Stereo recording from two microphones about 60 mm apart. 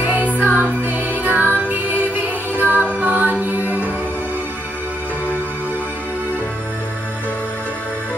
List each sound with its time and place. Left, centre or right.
0.0 s music: right